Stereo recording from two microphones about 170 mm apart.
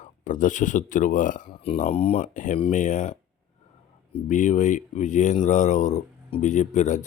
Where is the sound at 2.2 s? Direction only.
50° left (ahead or behind).